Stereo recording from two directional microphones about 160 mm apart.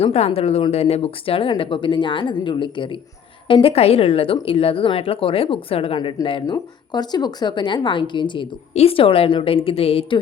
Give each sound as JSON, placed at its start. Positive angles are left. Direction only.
{"t": 0.0, "sound": "speech", "side_deg": 40}